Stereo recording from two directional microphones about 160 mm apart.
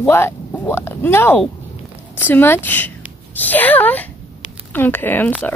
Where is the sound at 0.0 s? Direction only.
15° left (ahead or behind).